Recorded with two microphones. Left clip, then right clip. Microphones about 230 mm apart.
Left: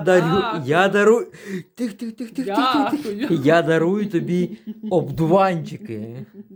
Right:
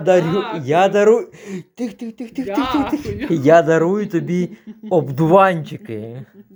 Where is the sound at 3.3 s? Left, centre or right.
Centre.